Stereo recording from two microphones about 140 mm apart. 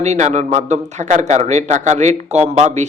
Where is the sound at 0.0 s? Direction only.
55° right (ahead or behind).